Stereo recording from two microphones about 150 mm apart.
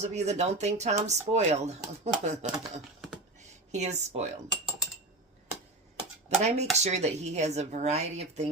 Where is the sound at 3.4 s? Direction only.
50° right (ahead or behind).